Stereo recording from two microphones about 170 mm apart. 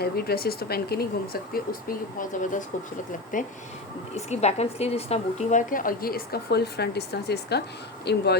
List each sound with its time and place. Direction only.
0.0 s a woman's voice: 65° left (ahead or behind); by 3.5 s 50° left (ahead or behind)
4.1 s a woman's voice: 40° left (ahead or behind); by 8.4 s 75° left (ahead or behind)